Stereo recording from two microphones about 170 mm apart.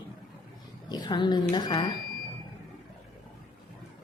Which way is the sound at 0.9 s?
25° left (ahead or behind).